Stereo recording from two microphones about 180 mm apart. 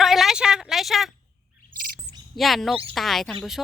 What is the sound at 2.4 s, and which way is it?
Speech, centre (ahead or behind).